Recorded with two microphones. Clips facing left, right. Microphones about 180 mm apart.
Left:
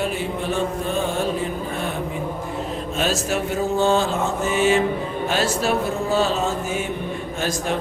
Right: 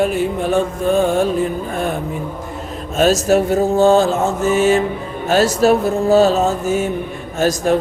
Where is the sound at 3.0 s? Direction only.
40° right (ahead or behind).